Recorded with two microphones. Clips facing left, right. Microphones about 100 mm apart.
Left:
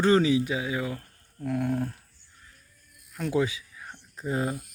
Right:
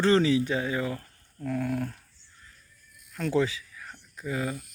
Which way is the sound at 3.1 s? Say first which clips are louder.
Even; 10° left (ahead or behind).